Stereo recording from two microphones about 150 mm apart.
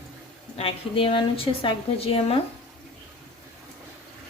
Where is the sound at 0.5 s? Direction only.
40° left (ahead or behind).